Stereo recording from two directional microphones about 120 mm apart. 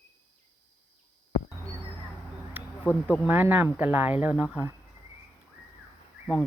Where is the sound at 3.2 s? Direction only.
15° right (ahead or behind).